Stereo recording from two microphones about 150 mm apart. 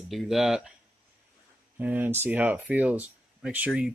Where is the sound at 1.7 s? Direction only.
10° right (ahead or behind).